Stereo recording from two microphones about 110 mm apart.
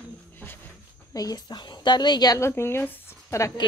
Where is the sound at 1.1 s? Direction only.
35° left (ahead or behind).